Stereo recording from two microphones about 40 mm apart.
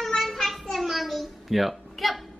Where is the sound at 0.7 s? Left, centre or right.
Centre.